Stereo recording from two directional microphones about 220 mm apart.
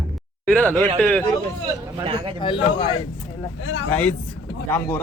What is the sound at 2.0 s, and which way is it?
Speech, 25° right (ahead or behind).